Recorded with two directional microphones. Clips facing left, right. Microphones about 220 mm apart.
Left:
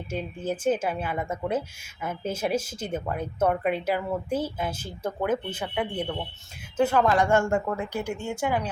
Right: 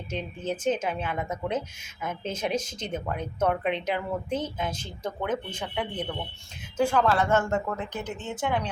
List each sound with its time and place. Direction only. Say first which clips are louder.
0.1 s speech: left 1 dB; 5° left (ahead or behind)